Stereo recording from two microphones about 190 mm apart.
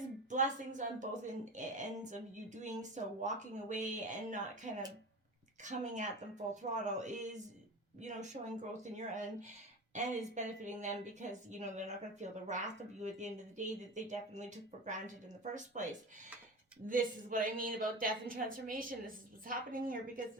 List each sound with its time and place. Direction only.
0.3 s a woman's voice: 40° right (ahead or behind)
15.5 s a woman's voice: 40° right (ahead or behind)